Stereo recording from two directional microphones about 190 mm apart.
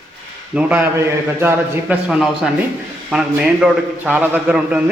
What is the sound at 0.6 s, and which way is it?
A man's voice, 10° right (ahead or behind).